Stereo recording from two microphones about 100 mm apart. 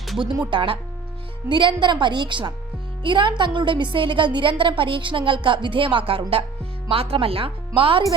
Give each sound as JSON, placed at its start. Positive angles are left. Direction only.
{"t": 0.5, "sound": "a woman's voice", "side_deg": -55}